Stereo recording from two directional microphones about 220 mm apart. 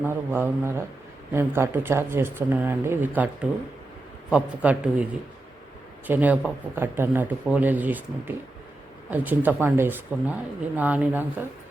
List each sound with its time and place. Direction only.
0.0 s speech: 10° right (ahead or behind)
4.3 s a man's voice: 5° right (ahead or behind)
6.1 s speech: 5° right (ahead or behind)